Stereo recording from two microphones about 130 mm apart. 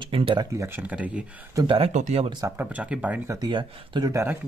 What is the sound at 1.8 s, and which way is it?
Speech, 65° right (ahead or behind).